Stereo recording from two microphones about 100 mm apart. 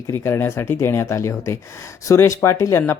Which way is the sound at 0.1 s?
25° left (ahead or behind).